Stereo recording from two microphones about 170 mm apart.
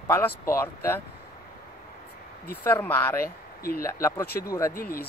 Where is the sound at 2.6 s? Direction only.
10° left (ahead or behind).